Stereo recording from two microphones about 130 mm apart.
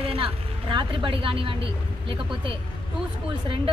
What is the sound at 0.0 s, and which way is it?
A woman's voice, 45° right (ahead or behind).